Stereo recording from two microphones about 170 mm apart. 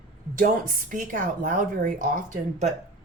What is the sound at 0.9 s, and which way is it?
A woman's voice, 55° right (ahead or behind).